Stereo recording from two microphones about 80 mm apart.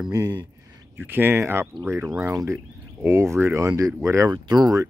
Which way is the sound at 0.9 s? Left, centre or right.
Right.